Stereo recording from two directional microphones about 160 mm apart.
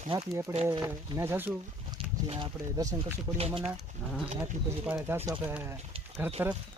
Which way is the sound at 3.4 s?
35° right (ahead or behind).